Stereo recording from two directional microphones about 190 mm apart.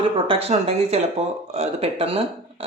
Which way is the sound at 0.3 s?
30° right (ahead or behind).